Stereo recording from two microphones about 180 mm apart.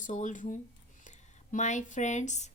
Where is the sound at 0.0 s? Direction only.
45° left (ahead or behind).